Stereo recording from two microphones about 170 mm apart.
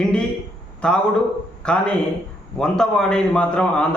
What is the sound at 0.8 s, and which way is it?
A man's voice, 5° left (ahead or behind).